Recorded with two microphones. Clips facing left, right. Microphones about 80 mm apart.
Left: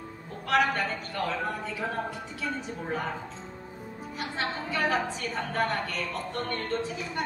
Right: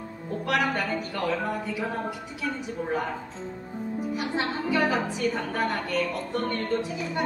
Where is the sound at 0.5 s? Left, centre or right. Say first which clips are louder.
Left 1 dB; centre.